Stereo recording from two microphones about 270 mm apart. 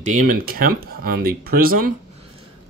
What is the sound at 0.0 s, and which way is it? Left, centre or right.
Speech, right.